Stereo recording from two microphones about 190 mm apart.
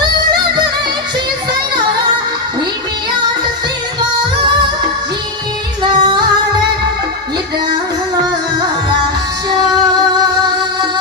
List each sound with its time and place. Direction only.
5.8 s music: 25° right (ahead or behind)